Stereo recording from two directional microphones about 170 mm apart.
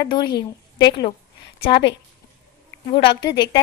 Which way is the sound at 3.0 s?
25° left (ahead or behind).